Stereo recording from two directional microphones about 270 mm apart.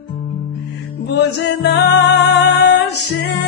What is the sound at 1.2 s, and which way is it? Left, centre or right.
Music, left.